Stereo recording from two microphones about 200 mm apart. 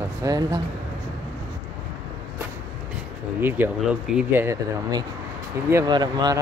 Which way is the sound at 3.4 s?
10° right (ahead or behind).